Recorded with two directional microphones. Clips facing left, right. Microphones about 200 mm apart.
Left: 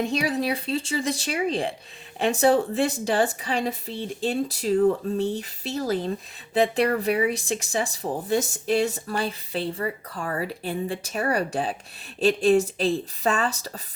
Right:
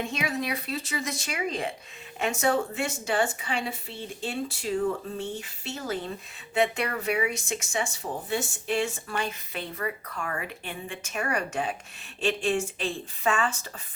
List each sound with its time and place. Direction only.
0.0 s speech: 35° left (ahead or behind)